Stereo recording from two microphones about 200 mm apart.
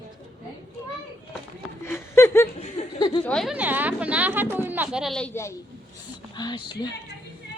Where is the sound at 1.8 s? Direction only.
10° left (ahead or behind).